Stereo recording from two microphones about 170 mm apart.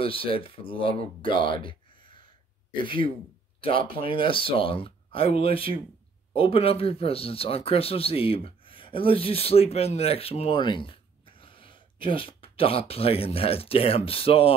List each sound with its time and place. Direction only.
0.0 s speech: 30° left (ahead or behind)